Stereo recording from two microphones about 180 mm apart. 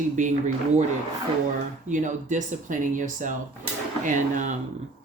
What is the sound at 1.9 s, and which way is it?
Speech, 45° right (ahead or behind).